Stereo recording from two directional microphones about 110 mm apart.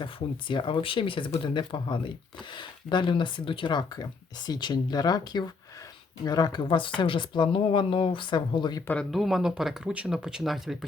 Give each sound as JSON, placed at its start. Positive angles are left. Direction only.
{"t": 0.0, "sound": "speech", "side_deg": 50}
{"t": 9.0, "sound": "speech", "side_deg": 0}